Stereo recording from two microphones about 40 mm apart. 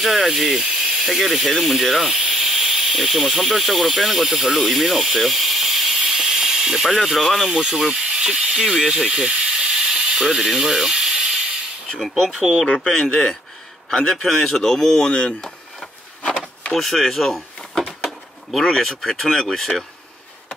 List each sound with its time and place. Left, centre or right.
0.0 s speech: centre
5.9 s snake: centre
7.5 s speech: centre
9.2 s mechanisms: right
12.0 s speech: centre
12.9 s speech: left
16.7 s speech: centre
17.6 s a sound: centre
18.6 s speech: centre